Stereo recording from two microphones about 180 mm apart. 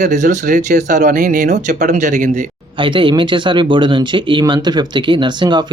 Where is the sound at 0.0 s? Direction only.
45° right (ahead or behind).